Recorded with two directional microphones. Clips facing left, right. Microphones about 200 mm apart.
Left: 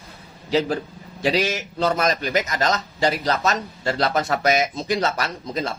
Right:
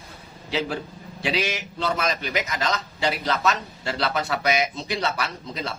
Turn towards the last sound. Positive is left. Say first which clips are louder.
# left 5 dB
turn(degrees=45)  # may be behind; listen again after turning